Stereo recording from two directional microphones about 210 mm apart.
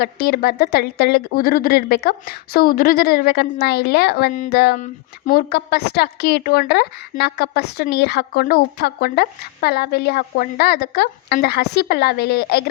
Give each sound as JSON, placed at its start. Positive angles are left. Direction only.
{"t": 0.0, "sound": "speech", "side_deg": 45}